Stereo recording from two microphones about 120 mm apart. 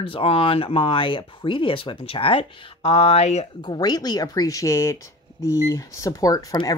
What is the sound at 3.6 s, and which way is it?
Speech, 35° left (ahead or behind).